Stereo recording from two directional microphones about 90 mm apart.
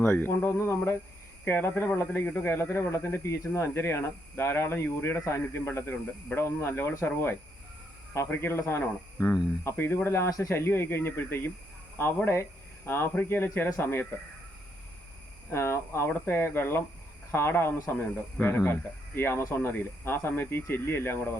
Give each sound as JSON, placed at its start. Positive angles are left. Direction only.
{"t": 0.0, "sound": "a man's voice", "side_deg": 25}
{"t": 15.4, "sound": "a man's voice", "side_deg": 30}